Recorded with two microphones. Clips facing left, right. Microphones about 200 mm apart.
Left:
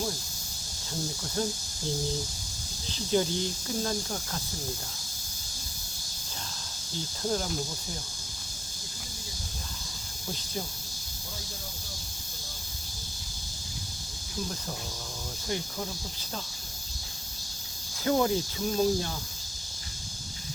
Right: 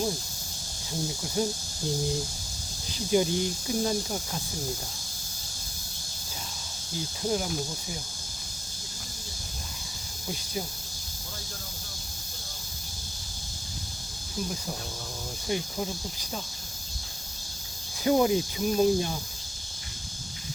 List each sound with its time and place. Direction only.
1.4 s speech: 10° right (ahead or behind)
2.9 s speech: 15° right (ahead or behind)
7.2 s speech: 10° right (ahead or behind)
15.4 s speech: 20° right (ahead or behind)
18.0 s speech: 15° right (ahead or behind)